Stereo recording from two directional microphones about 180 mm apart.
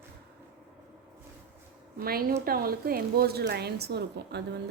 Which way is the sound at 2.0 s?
55° right (ahead or behind).